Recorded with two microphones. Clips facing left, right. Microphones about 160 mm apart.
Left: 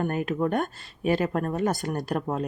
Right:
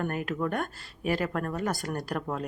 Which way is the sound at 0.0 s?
20° left (ahead or behind).